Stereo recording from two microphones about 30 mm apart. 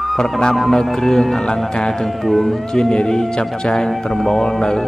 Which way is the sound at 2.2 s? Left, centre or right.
Centre.